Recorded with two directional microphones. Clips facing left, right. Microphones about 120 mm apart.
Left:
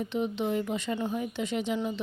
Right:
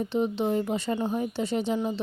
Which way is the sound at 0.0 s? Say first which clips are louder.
Right 4 dB; 35° right (ahead or behind).